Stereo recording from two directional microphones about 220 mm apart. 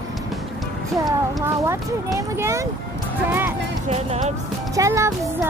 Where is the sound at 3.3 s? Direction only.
10° right (ahead or behind).